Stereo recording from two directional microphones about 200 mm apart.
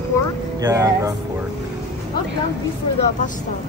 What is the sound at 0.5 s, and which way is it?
Speech, 15° right (ahead or behind).